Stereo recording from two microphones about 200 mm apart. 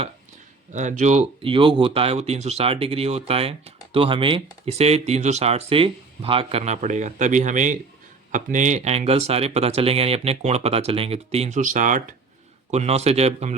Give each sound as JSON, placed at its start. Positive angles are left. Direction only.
{"t": 0.7, "sound": "speech", "side_deg": -35}